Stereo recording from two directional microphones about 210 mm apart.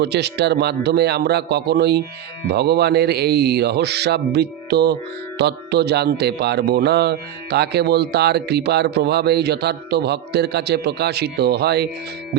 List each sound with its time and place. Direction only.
0.0 s speech: 50° right (ahead or behind)